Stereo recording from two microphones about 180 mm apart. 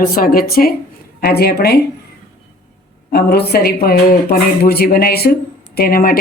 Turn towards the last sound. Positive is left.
turn(degrees=55)  # may be behind; listen again after turning